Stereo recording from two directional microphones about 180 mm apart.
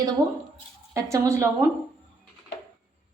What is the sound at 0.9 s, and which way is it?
Speech, 15° right (ahead or behind).